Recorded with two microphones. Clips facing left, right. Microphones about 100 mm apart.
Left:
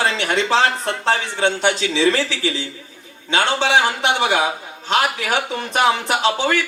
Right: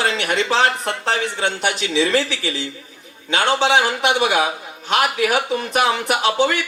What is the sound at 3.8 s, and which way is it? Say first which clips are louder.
Speech: right 1 dB; 25° left (ahead or behind).